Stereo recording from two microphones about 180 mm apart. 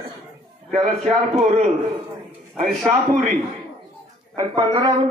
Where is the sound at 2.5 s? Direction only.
Centre (ahead or behind).